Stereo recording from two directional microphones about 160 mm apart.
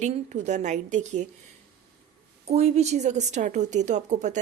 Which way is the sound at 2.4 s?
40° right (ahead or behind).